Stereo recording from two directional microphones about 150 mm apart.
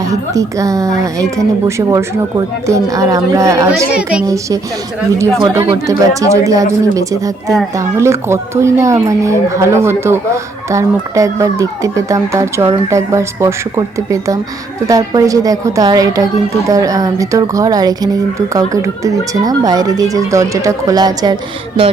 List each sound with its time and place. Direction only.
0.1 s a woman's voice: 20° right (ahead or behind)
3.8 s a child's voice: 5° right (ahead or behind)
4.3 s a woman's voice: 25° right (ahead or behind)